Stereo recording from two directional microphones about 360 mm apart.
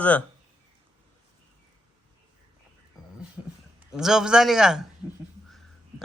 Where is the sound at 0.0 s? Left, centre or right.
Centre.